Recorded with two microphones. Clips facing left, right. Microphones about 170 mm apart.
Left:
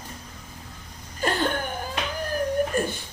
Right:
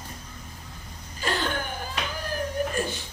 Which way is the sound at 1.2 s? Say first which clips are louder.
Left 4 dB; 50° left (ahead or behind).